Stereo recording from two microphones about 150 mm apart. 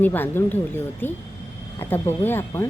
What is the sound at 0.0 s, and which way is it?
Speech, 15° left (ahead or behind).